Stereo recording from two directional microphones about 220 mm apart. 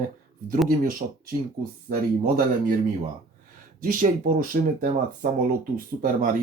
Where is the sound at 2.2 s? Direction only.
40° right (ahead or behind).